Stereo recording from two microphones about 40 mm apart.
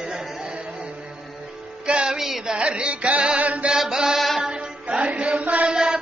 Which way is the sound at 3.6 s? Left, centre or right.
Centre.